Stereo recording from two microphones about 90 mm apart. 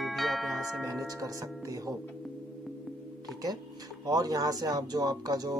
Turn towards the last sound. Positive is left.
turn(degrees=-45)  # may be behind; listen again after turning